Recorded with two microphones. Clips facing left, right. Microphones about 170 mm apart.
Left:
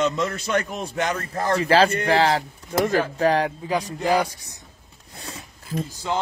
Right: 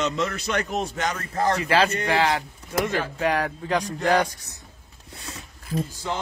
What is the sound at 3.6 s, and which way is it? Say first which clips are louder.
Speech: even; 5° left (ahead or behind).